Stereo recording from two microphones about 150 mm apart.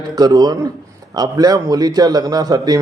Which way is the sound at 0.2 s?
25° right (ahead or behind).